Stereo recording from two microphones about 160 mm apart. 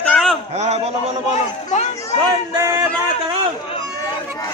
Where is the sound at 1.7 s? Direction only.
50° left (ahead or behind).